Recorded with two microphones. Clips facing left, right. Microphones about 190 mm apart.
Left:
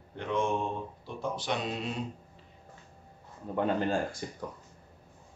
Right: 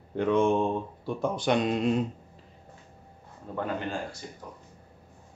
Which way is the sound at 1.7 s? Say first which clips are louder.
Right 9 dB; 50° right (ahead or behind).